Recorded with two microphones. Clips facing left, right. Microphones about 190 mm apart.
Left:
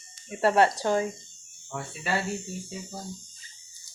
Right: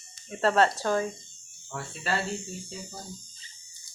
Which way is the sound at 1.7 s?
5° left (ahead or behind).